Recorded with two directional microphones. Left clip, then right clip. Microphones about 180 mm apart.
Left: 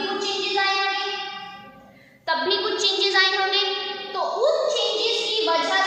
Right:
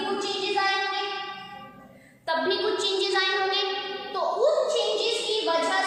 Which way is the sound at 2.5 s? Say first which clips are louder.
Left 4 dB; 15° left (ahead or behind).